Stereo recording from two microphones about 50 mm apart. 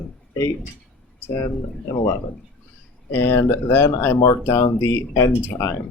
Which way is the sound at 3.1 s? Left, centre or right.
Left.